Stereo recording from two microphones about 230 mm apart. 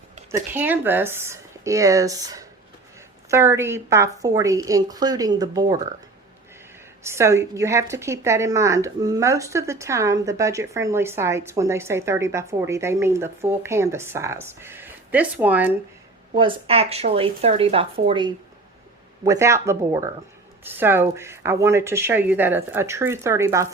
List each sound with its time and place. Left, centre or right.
0.3 s a woman's voice: centre
7.0 s a woman's voice: centre
16.3 s a woman's voice: right